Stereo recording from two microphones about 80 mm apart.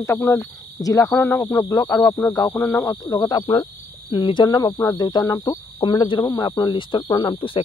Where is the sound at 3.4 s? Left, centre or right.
Left.